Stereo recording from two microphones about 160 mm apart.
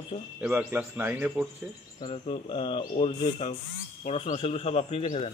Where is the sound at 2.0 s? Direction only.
35° left (ahead or behind).